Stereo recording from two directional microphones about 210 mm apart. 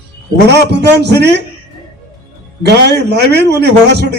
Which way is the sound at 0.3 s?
55° right (ahead or behind).